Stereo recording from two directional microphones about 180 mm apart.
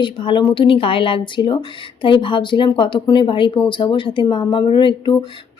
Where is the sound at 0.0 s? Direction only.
25° left (ahead or behind).